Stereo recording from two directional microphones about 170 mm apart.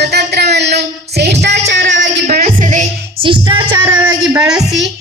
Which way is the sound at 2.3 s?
50° right (ahead or behind).